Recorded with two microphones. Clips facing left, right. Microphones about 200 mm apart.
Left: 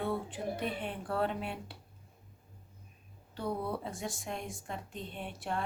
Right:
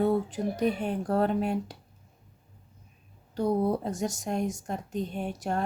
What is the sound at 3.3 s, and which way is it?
Speech, 40° right (ahead or behind).